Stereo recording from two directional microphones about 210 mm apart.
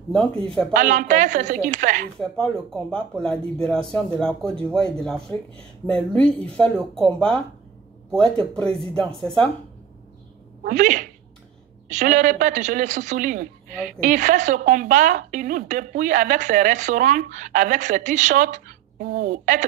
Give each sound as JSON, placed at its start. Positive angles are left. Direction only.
{"t": 0.7, "sound": "speech", "side_deg": -35}
{"t": 2.1, "sound": "speech", "side_deg": 5}
{"t": 10.6, "sound": "speech", "side_deg": -35}